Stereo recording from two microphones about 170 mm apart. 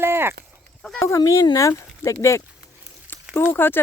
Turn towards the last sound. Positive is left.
turn(degrees=10)  # may be behind; listen again after turning